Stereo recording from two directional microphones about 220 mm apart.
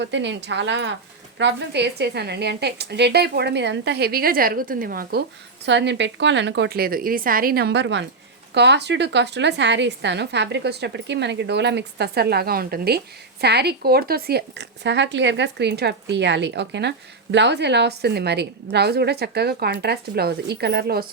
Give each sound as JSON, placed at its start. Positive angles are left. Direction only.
{"t": 0.0, "sound": "speech", "side_deg": -55}
{"t": 5.6, "sound": "speech", "side_deg": -55}